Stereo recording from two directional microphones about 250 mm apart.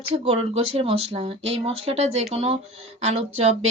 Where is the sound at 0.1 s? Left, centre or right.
Right.